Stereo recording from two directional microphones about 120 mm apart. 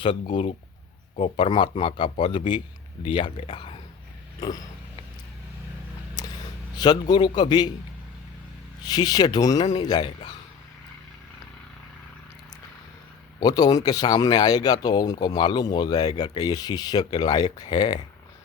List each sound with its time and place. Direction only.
0.0 s speech: 45° left (ahead or behind)
4.4 s a sound: 30° left (ahead or behind)
6.7 s speech: 35° left (ahead or behind)
8.8 s speech: 35° left (ahead or behind)
13.4 s speech: 35° left (ahead or behind)